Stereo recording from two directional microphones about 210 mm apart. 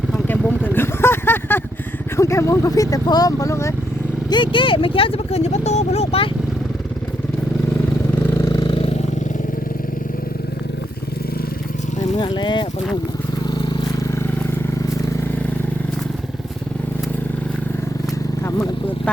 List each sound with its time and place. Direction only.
0.3 s vehicle: 10° left (ahead or behind)
2.1 s speech: 15° left (ahead or behind)
8.1 s vehicle: 10° left (ahead or behind)
12.2 s speech: 20° left (ahead or behind)